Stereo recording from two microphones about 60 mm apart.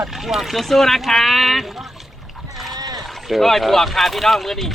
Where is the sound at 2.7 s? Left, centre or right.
Right.